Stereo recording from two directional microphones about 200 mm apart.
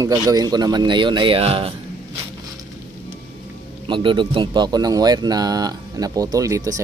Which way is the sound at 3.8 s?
25° right (ahead or behind).